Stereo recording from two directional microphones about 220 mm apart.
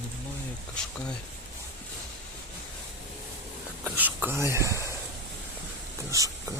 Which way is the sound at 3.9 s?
10° right (ahead or behind).